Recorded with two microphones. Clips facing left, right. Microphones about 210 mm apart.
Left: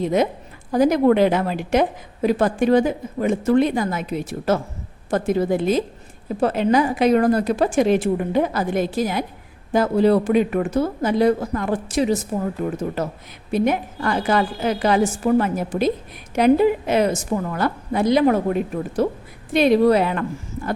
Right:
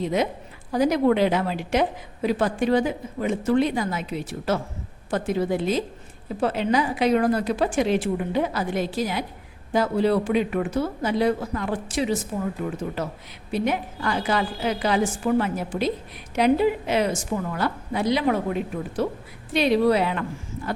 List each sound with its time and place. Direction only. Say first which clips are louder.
0.0 s a woman's voice: left 4 dB; 50° left (ahead or behind)